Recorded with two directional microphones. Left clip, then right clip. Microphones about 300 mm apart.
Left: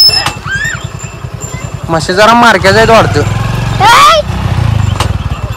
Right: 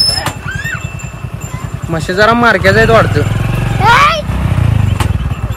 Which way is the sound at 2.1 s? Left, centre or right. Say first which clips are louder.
Left 4 dB; centre.